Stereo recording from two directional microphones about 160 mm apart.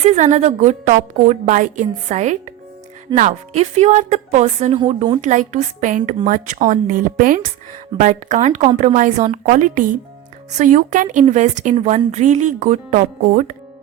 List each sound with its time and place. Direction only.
0.0 s a woman's voice: 45° right (ahead or behind)